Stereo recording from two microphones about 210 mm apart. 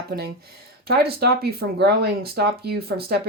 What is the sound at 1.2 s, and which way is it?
Speech, 50° right (ahead or behind).